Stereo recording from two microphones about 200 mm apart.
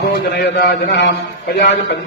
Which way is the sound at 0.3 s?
50° left (ahead or behind).